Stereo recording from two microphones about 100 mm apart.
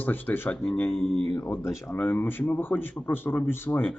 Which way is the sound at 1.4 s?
25° left (ahead or behind).